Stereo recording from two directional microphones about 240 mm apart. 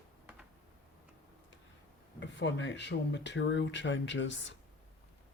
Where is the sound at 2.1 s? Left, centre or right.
Left.